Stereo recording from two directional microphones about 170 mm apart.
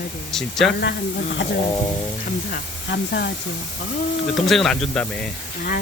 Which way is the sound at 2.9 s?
80° left.